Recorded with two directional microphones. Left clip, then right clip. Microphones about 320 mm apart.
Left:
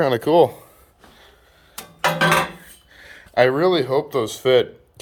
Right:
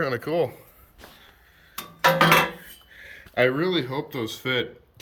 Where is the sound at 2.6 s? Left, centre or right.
Centre.